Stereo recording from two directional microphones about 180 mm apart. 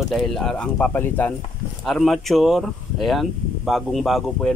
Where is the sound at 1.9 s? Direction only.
Centre (ahead or behind).